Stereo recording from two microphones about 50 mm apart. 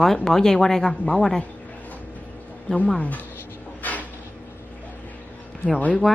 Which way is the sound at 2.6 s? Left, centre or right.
Left.